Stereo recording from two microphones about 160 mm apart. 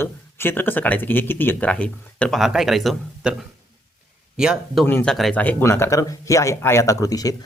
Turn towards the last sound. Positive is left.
turn(degrees=20)  # may be behind; listen again after turning